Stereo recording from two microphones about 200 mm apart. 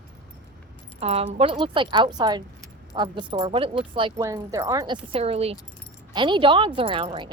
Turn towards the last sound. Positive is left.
turn(degrees=-25)  # may be behind; listen again after turning